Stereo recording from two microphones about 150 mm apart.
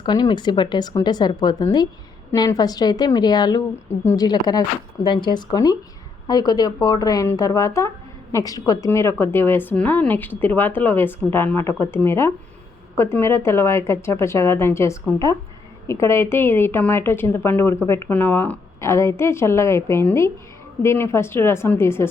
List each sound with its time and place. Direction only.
0.0 s a woman's voice: 30° left (ahead or behind)